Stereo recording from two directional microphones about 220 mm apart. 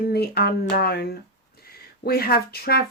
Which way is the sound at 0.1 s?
45° left (ahead or behind).